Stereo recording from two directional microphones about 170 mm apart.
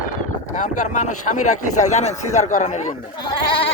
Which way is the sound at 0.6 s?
45° left (ahead or behind).